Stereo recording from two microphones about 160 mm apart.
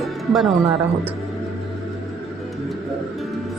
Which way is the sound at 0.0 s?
Centre (ahead or behind).